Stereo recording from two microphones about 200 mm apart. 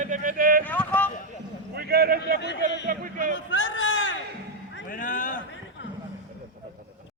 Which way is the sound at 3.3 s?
70° left (ahead or behind).